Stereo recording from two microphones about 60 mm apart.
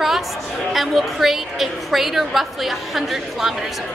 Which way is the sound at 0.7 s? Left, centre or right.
Centre.